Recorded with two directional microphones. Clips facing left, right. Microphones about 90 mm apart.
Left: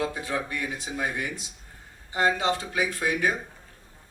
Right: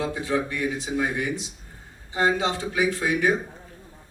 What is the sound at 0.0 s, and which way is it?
A man's voice, 20° right (ahead or behind).